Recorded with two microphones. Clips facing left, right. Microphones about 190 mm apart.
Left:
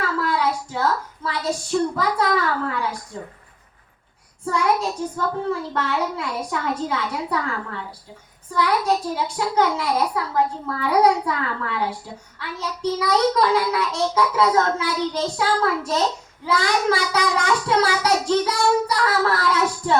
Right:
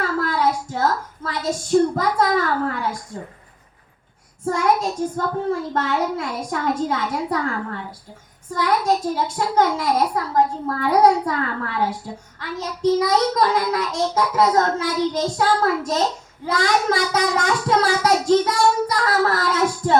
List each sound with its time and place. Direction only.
0.0 s a woman's voice: 45° right (ahead or behind)
4.4 s a child's voice: 45° right (ahead or behind)
9.1 s a child's voice: 45° right (ahead or behind)